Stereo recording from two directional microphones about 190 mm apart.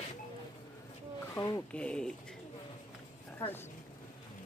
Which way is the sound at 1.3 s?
20° left (ahead or behind).